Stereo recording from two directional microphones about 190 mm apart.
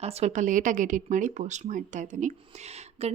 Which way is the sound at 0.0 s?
35° right (ahead or behind).